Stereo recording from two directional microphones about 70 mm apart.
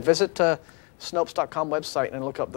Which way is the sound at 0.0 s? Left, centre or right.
Centre.